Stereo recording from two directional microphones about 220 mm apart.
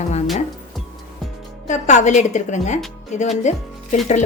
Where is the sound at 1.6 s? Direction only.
35° left (ahead or behind).